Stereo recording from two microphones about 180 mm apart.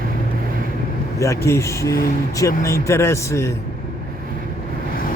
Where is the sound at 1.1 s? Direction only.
15° left (ahead or behind).